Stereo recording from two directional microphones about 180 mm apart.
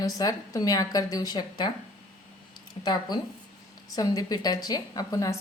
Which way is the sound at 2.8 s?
30° left (ahead or behind).